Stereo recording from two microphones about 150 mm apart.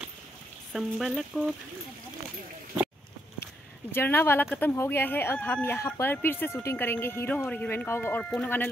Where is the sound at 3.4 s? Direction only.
15° left (ahead or behind).